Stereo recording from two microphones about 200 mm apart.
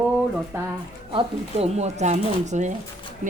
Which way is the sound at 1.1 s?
30° right (ahead or behind).